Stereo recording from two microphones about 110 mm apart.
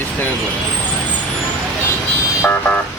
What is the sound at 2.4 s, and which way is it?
Car alarm, 20° left (ahead or behind).